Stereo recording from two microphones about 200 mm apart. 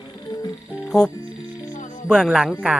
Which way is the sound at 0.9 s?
Centre (ahead or behind).